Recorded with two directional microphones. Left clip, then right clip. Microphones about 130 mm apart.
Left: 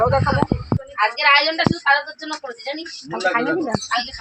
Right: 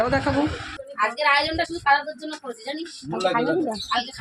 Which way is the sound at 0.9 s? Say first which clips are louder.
Left 5 dB; 25° right (ahead or behind).